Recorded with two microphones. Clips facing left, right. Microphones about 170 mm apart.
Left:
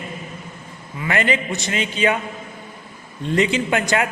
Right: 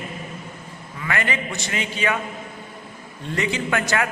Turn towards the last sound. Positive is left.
turn(degrees=20)  # may be behind; listen again after turning